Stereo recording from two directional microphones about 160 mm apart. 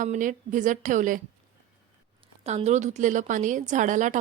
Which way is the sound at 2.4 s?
40° right (ahead or behind).